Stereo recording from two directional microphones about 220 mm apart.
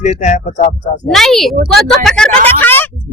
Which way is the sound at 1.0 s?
Centre (ahead or behind).